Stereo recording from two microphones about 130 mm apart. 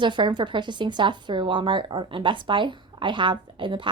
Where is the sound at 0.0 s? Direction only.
35° right (ahead or behind).